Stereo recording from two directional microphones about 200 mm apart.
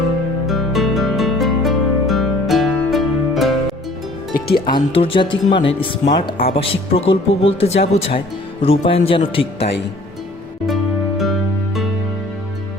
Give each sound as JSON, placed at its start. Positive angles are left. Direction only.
{"t": 0.4, "sound": "music", "side_deg": 0}
{"t": 4.4, "sound": "music", "side_deg": 50}
{"t": 4.7, "sound": "speech", "side_deg": 25}
{"t": 6.2, "sound": "speech", "side_deg": 50}
{"t": 6.6, "sound": "speech", "side_deg": 30}
{"t": 11.2, "sound": "music", "side_deg": 0}